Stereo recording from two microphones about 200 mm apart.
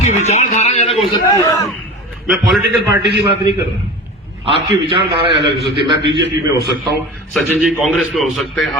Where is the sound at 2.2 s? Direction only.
Centre (ahead or behind).